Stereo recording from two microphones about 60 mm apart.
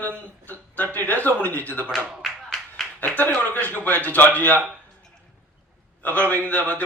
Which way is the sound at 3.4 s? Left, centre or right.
Left.